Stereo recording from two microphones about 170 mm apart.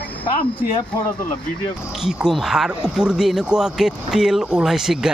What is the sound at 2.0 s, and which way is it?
Speech, centre (ahead or behind).